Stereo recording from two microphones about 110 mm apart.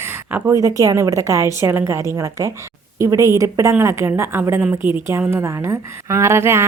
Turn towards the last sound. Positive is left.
turn(degrees=-20)  # may be behind; listen again after turning